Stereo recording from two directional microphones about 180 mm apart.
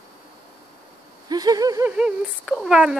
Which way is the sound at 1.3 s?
20° right (ahead or behind).